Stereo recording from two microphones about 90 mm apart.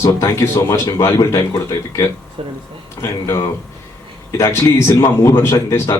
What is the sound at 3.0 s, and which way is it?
Speech, 30° left (ahead or behind).